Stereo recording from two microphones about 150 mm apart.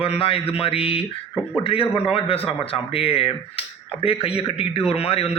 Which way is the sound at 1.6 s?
40° left (ahead or behind).